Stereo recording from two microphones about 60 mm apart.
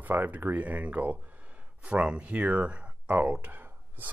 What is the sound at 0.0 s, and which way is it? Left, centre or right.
Speech, right.